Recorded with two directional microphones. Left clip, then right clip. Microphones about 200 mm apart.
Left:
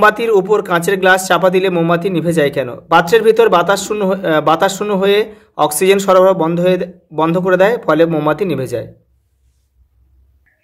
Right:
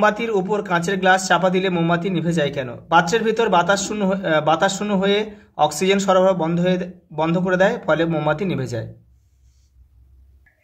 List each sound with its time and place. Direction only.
0.0 s a man's voice: 30° left (ahead or behind)